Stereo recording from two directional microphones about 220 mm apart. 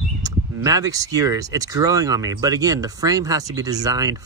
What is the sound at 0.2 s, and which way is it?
Speech, 15° right (ahead or behind).